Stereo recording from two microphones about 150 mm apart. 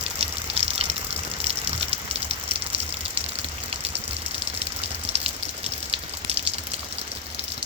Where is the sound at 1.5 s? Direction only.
40° right (ahead or behind).